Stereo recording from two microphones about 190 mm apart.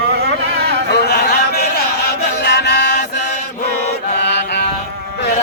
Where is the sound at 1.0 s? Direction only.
60° left (ahead or behind).